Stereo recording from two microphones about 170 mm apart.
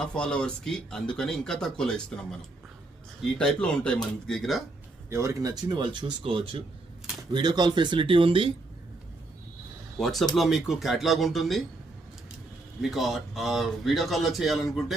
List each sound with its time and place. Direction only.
0.0 s speech: 5° left (ahead or behind)
5.0 s a man's voice: 15° right (ahead or behind); by 8.5 s 30° right (ahead or behind)
10.0 s speech: centre (ahead or behind)
12.8 s speech: centre (ahead or behind)